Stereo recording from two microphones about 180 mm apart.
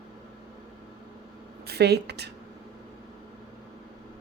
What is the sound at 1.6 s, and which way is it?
Speech, 65° right (ahead or behind).